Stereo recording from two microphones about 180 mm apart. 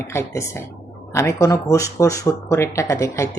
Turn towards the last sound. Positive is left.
turn(degrees=15)  # may be behind; listen again after turning